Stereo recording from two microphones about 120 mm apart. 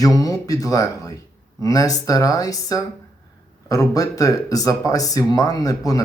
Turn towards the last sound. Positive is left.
turn(degrees=30)  # may be behind; listen again after turning